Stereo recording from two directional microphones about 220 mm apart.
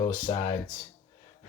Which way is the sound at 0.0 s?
20° left (ahead or behind).